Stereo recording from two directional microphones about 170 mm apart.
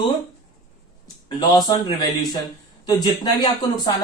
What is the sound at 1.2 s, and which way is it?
Speech, 25° left (ahead or behind).